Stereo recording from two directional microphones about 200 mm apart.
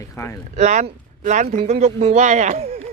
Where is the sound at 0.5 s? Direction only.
35° right (ahead or behind).